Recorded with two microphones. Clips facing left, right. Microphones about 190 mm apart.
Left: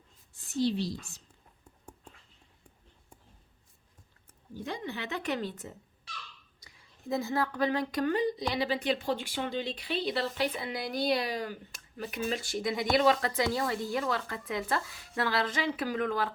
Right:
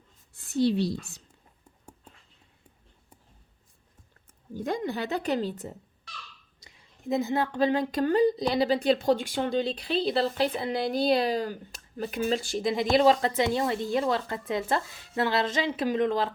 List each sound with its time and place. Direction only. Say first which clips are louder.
0.3 s speech: right 5 dB; 65° right (ahead or behind)
4.5 s a woman's voice: right 7 dB; 45° right (ahead or behind)
6.6 s speech: right 3 dB; 25° right (ahead or behind)